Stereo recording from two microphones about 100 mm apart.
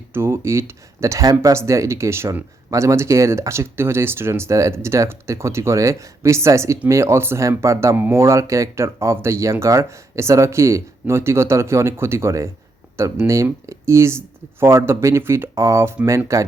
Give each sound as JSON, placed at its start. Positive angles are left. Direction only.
{"t": 0.1, "sound": "speech", "side_deg": -25}